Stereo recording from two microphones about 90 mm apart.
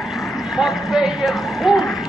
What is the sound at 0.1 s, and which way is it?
Speech, centre (ahead or behind).